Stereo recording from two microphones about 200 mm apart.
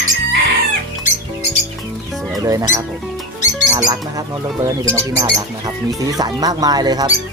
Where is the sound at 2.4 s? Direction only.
15° right (ahead or behind).